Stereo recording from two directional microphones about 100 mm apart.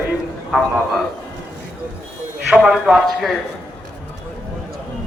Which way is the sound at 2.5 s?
10° right (ahead or behind).